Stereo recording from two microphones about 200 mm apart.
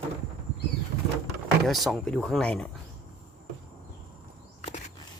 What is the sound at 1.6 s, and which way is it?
A man's voice, centre (ahead or behind).